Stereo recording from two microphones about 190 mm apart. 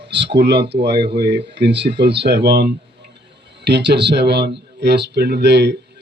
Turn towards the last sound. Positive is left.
turn(degrees=-60)  # may be behind; listen again after turning